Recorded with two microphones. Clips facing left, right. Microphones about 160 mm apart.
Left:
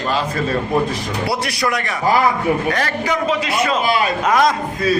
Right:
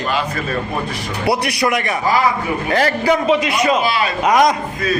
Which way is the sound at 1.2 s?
20° right (ahead or behind).